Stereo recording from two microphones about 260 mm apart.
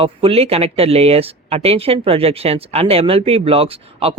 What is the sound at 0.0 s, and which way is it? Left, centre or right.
Speech, right.